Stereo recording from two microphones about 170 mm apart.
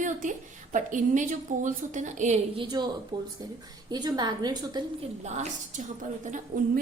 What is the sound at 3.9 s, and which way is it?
Speech, 25° right (ahead or behind).